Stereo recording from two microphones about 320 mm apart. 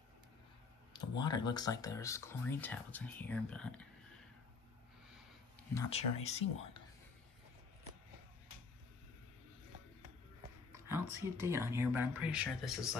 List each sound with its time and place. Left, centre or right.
0.9 s speech: centre
5.8 s speech: centre
10.7 s speech: centre